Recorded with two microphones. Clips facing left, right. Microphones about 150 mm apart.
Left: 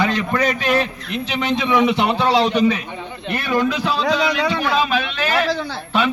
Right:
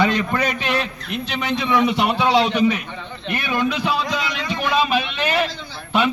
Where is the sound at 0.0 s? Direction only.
10° right (ahead or behind).